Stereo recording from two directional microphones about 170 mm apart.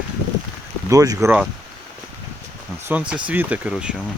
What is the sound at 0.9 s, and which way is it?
Speech, 20° right (ahead or behind).